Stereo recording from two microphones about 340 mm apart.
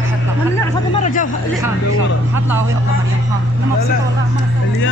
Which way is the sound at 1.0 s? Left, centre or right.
Left.